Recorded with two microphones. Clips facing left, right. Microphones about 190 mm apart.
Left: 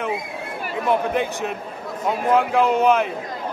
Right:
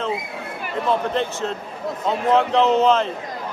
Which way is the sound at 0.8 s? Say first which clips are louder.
Left 1 dB; 15° left (ahead or behind).